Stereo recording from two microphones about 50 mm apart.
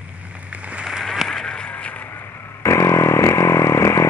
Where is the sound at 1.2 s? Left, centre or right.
Centre.